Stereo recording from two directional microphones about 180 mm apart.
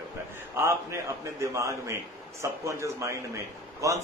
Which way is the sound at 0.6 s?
15° right (ahead or behind).